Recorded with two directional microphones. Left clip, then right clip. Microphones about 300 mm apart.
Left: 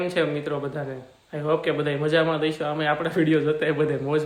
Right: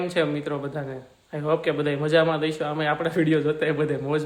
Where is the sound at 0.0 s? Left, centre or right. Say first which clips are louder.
Even; centre.